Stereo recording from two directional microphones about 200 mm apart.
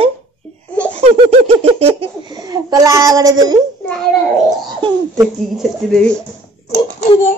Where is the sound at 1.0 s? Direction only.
30° right (ahead or behind).